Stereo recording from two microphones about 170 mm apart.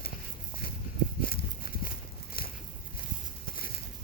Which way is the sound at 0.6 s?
65° left (ahead or behind).